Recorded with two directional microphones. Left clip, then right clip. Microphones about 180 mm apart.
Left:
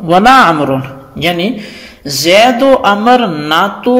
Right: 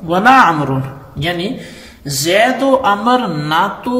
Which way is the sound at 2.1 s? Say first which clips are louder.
Left 5 dB; 35° left (ahead or behind).